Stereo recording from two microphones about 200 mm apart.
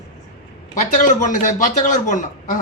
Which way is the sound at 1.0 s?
40° left (ahead or behind).